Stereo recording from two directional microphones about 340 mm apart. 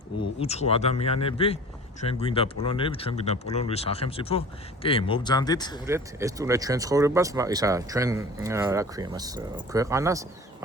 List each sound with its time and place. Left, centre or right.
0.2 s speech: centre
5.8 s speech: centre